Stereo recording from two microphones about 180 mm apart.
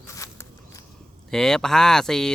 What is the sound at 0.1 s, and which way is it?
Walk, 15° left (ahead or behind).